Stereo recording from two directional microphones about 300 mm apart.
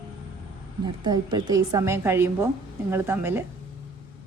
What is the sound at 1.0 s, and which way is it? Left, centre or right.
A man's voice, centre.